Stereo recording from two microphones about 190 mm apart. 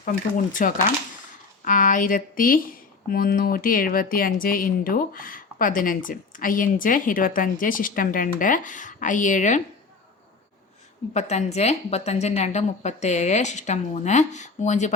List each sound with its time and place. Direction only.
0.0 s speech: 45° left (ahead or behind)
11.1 s a woman's voice: 35° left (ahead or behind)